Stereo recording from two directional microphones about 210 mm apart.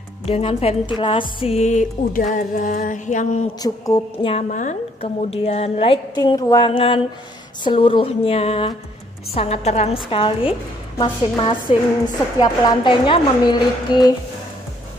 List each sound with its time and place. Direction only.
0.2 s a woman's voice: 30° left (ahead or behind)
1.4 s music: 30° left (ahead or behind)
3.5 s a woman's voice: 15° left (ahead or behind)